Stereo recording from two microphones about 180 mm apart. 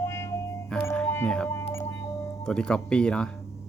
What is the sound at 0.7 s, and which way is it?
Music, 10° left (ahead or behind).